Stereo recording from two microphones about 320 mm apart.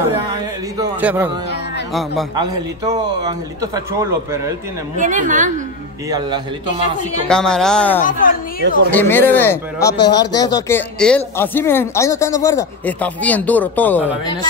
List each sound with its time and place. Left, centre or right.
0.7 s a man's voice: centre
2.3 s a man's voice: centre
4.9 s a woman's voice: right
6.0 s a man's voice: centre
7.2 s a woman's voice: centre
8.0 s speech: left
8.9 s speech: centre